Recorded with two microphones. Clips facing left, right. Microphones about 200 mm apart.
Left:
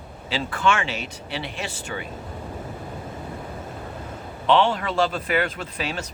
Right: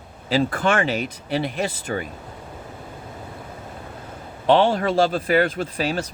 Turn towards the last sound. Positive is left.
turn(degrees=-40)  # may be behind; listen again after turning